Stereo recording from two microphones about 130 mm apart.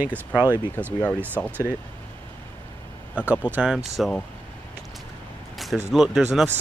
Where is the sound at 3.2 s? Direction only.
15° right (ahead or behind).